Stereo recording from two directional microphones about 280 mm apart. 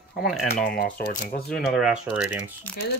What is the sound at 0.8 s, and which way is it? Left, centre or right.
Speech, left.